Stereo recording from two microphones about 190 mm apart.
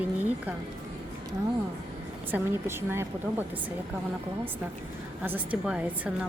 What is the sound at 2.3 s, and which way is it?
A woman's voice, 10° right (ahead or behind).